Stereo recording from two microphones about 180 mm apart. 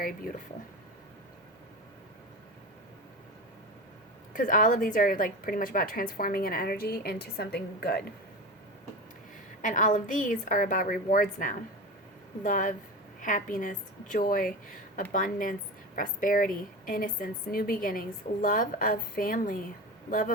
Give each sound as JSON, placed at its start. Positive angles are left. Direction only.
{"t": 4.4, "sound": "a woman's voice", "side_deg": 50}
{"t": 9.6, "sound": "a woman's voice", "side_deg": 45}